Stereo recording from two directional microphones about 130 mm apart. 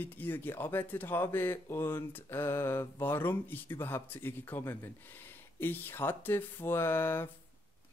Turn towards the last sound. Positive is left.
turn(degrees=15)  # may be behind; listen again after turning